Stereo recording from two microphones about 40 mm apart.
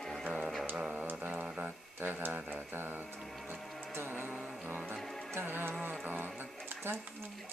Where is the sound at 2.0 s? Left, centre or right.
Right.